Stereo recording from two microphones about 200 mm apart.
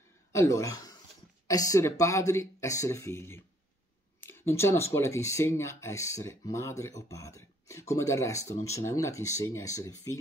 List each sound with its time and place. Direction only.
0.3 s a woman's voice: 15° left (ahead or behind)